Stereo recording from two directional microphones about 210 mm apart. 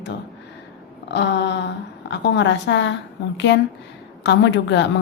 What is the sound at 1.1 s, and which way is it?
A woman's voice, 55° left (ahead or behind).